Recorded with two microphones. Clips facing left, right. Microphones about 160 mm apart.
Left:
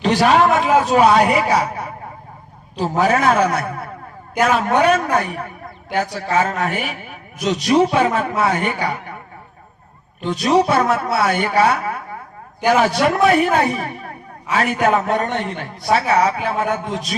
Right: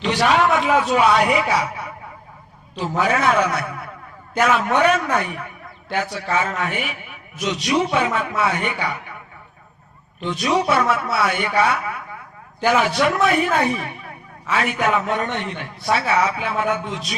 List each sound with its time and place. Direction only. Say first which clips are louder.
0.0 s a man's voice: left 4 dB; 40° left (ahead or behind)
3.0 s a man's voice: left 3 dB; 40° left (ahead or behind)
10.2 s a man's voice: left 4 dB; 40° left (ahead or behind)
13.7 s a sound: left 4 dB; 40° left (ahead or behind)
14.5 s a man's voice: left 3 dB; 40° left (ahead or behind)